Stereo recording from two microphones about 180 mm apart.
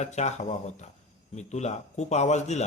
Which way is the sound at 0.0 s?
40° left (ahead or behind).